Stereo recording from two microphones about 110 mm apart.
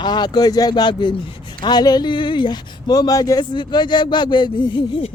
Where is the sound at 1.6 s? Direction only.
40° left (ahead or behind).